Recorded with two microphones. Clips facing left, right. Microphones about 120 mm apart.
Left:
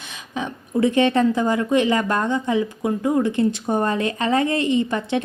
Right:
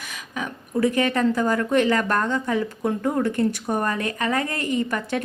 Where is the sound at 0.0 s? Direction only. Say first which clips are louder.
Left 3 dB; 25° left (ahead or behind).